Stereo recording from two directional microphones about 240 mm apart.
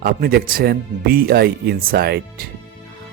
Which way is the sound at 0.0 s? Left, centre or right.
Right.